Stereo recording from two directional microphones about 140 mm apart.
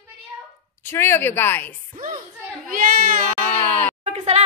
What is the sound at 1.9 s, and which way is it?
Speech, 65° right (ahead or behind).